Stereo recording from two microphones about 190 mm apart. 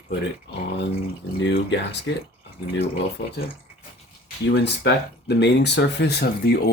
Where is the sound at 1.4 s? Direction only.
70° left (ahead or behind).